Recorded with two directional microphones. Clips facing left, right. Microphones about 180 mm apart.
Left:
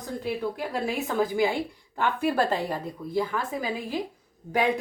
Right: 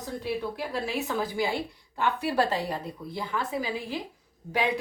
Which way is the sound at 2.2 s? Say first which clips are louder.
Left 3 dB; 50° left (ahead or behind).